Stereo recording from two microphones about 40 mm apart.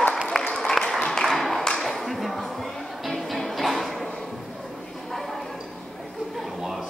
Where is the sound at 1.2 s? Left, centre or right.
Centre.